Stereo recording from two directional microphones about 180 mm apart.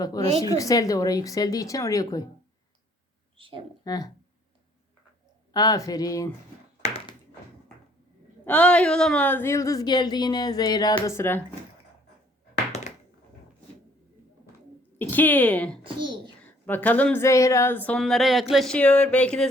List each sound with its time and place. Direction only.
0.5 s speech: 20° left (ahead or behind)
3.3 s speech: 30° right (ahead or behind)
3.8 s speech: 20° left (ahead or behind)
5.5 s speech: 20° left (ahead or behind)
8.4 s speech: 5° left (ahead or behind)
14.9 s a woman's voice: 10° left (ahead or behind)
16.0 s a child's voice: 25° right (ahead or behind)
16.4 s speech: 10° left (ahead or behind)